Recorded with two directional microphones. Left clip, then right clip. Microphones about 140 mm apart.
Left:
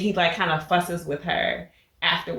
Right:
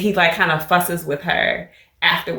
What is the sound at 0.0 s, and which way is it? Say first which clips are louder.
Speech: right 6 dB; 35° right (ahead or behind).